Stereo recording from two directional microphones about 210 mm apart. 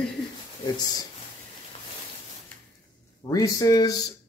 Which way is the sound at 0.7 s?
20° left (ahead or behind).